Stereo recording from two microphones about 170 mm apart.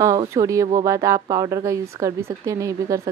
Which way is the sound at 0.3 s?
20° right (ahead or behind).